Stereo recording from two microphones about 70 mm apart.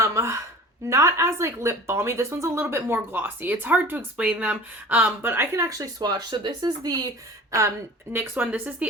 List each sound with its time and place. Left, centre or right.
0.0 s a sound: right
0.9 s speech: right
5.6 s speech: right
7.5 s speech: right
8.1 s speech: right